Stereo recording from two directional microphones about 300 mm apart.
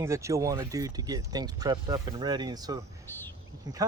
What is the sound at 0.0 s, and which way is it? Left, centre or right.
Speech, centre.